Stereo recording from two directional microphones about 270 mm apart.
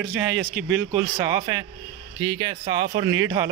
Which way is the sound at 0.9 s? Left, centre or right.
Centre.